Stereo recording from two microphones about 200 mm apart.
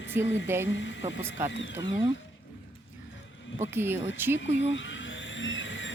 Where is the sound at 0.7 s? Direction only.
65° left (ahead or behind).